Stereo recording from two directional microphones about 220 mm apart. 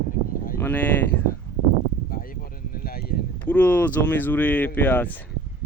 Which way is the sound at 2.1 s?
40° left (ahead or behind).